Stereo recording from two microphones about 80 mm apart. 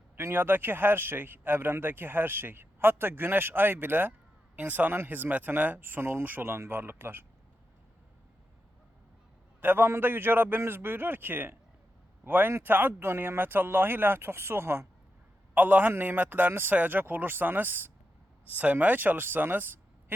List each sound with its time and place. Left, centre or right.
0.2 s speech: right
9.6 s speech: right